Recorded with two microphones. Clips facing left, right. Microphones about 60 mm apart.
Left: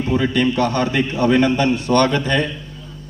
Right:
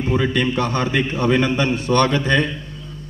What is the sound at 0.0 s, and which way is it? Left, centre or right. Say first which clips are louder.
A man's voice: left 2 dB; right.